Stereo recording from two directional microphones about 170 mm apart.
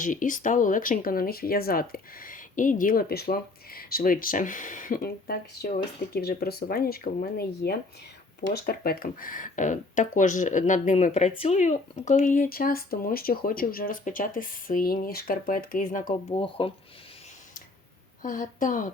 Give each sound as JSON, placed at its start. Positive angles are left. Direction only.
{"t": 0.0, "sound": "speech", "side_deg": 50}
{"t": 16.3, "sound": "speech", "side_deg": 30}
{"t": 18.2, "sound": "speech", "side_deg": 50}